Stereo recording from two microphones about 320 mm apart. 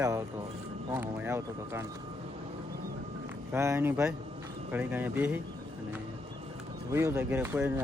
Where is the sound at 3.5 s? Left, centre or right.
Centre.